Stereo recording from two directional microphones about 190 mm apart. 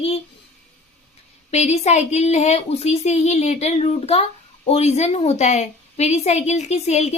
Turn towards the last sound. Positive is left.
turn(degrees=35)  # may be behind; listen again after turning